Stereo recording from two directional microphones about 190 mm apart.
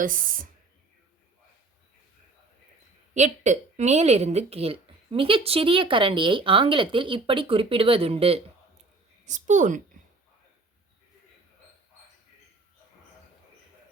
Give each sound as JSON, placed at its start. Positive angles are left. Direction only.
{"t": 0.0, "sound": "speech", "side_deg": -45}
{"t": 3.2, "sound": "a woman's voice", "side_deg": -40}